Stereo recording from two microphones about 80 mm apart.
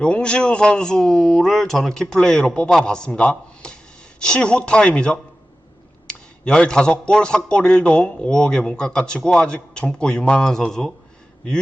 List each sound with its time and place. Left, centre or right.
0.0 s a man's voice: centre